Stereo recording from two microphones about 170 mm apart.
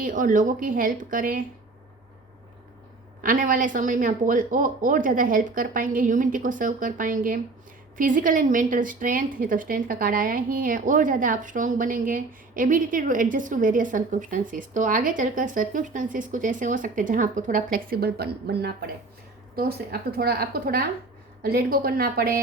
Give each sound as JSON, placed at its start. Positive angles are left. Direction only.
{"t": 0.0, "sound": "a woman's voice", "side_deg": -50}
{"t": 3.2, "sound": "a woman's voice", "side_deg": -55}